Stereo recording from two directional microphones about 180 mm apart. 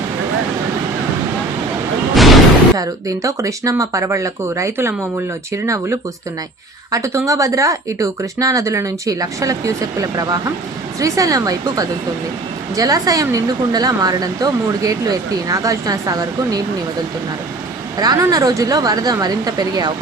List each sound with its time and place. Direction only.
2.1 s a sound: centre (ahead or behind)
2.7 s speech: 20° right (ahead or behind)
17.9 s speech: 20° right (ahead or behind)